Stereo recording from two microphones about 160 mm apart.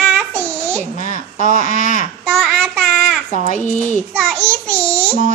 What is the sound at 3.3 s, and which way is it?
Speech, 55° left (ahead or behind).